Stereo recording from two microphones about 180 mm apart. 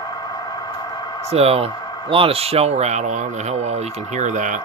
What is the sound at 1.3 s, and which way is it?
Speech, 35° right (ahead or behind).